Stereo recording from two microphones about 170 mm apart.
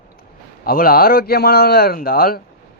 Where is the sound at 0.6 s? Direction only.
60° left (ahead or behind).